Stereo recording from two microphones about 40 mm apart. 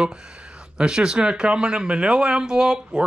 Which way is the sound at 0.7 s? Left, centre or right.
Centre.